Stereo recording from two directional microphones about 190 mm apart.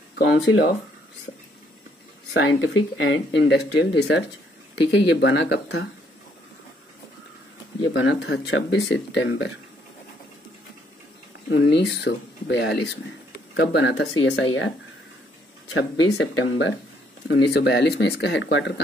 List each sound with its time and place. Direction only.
0.2 s speech: 70° left (ahead or behind)
2.3 s speech: 80° left; by 5.9 s 65° left (ahead or behind)
7.9 s speech: 75° left (ahead or behind)
11.5 s speech: 65° left (ahead or behind); by 14.7 s 90° left
15.7 s speech: 90° left
17.3 s speech: 65° left (ahead or behind)